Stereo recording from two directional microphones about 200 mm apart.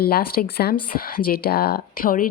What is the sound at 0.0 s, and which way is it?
Speech, 50° left (ahead or behind).